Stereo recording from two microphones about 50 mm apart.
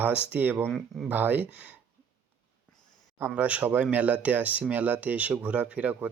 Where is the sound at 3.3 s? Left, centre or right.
Right.